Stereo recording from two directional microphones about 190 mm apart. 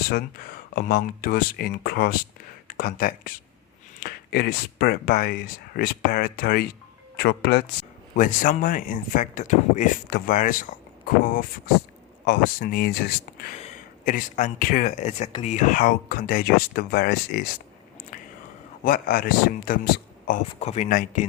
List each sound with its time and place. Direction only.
0.1 s speech: 50° left (ahead or behind)
8.1 s speech: 45° left (ahead or behind)
13.6 s speech: 40° left (ahead or behind)
18.1 s whispering: 45° left (ahead or behind)
18.9 s speech: 50° left (ahead or behind)
20.5 s speech: 35° left (ahead or behind)